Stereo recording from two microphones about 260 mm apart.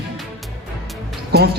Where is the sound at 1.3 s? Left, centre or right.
Right.